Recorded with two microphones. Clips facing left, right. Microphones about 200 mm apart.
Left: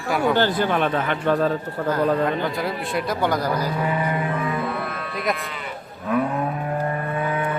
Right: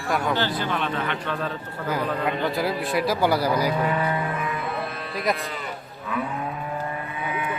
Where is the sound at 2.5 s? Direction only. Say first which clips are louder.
Right 1 dB; centre (ahead or behind).